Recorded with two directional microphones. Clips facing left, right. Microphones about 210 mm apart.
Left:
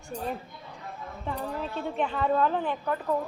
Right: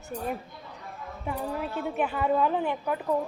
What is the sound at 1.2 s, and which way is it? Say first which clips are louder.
A woman's voice: right 1 dB; 10° right (ahead or behind).